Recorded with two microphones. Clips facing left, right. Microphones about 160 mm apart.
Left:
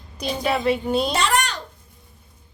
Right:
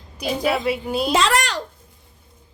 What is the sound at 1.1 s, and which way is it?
Speech, 90° right.